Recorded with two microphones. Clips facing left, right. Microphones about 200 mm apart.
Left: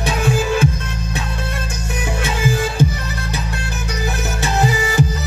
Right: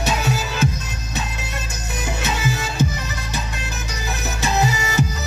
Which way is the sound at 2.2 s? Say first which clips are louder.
Left 5 dB; 50° left (ahead or behind).